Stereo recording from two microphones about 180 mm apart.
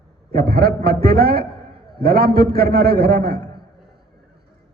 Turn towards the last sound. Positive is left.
turn(degrees=-65)  # may be behind; listen again after turning